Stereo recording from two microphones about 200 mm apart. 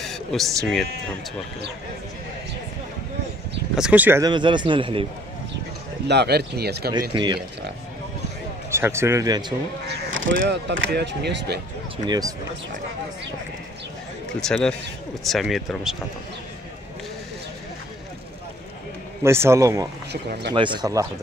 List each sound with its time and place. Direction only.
0.0 s speech: centre (ahead or behind)
3.7 s speech: 5° right (ahead or behind)
4.2 s a man's voice: 20° right (ahead or behind)
6.0 s speech: 55° right (ahead or behind)
6.9 s a man's voice: 20° right (ahead or behind)
8.6 s speech: 15° right (ahead or behind)
10.3 s speech: 45° right (ahead or behind)
10.7 s speech: 60° right (ahead or behind)
12.1 s speech: 20° right (ahead or behind)
14.5 s speech: 5° left (ahead or behind)
19.2 s speech: 15° right (ahead or behind)
20.1 s speech: 55° right (ahead or behind)
20.5 s a man's voice: 25° right (ahead or behind)